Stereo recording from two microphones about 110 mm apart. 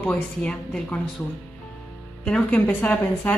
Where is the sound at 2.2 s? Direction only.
10° left (ahead or behind).